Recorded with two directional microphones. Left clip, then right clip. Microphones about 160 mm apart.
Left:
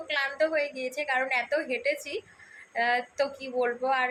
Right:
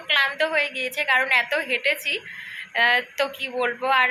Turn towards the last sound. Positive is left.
turn(degrees=5)  # may be behind; listen again after turning